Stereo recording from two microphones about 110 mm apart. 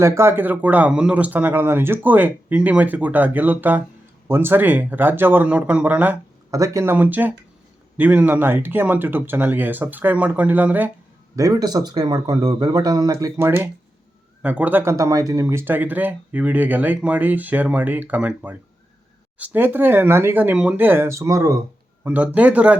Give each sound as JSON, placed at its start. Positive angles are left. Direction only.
{"t": 0.0, "sound": "speech", "side_deg": -25}
{"t": 6.5, "sound": "speech", "side_deg": -30}
{"t": 6.9, "sound": "speech", "side_deg": -15}
{"t": 11.3, "sound": "speech", "side_deg": -35}
{"t": 22.0, "sound": "speech", "side_deg": -15}